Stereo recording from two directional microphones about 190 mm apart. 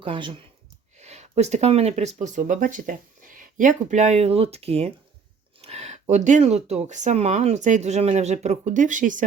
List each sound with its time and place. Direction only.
0.0 s speech: 25° right (ahead or behind)
0.9 s speech: 35° right (ahead or behind)